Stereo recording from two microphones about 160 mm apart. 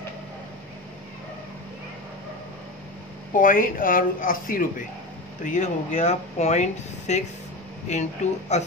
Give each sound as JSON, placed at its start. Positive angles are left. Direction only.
{"t": 3.3, "sound": "speech", "side_deg": 60}
{"t": 5.4, "sound": "speech", "side_deg": 50}